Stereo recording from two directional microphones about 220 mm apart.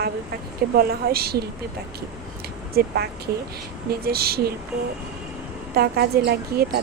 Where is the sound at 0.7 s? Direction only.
45° right (ahead or behind).